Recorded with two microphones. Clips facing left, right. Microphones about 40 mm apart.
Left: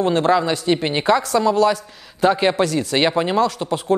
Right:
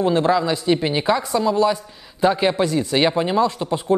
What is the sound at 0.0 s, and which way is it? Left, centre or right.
Speech, left.